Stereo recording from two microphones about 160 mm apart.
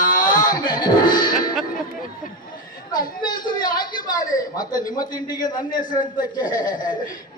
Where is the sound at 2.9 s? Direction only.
25° left (ahead or behind).